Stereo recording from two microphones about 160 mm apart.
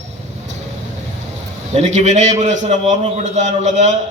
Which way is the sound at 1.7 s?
45° right (ahead or behind).